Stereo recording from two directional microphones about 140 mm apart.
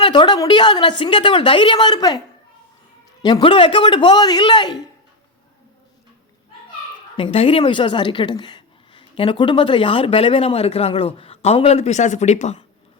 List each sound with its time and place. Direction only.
0.0 s speech: 35° left (ahead or behind)
3.4 s speech: 40° left (ahead or behind)
7.2 s speech: 40° left (ahead or behind)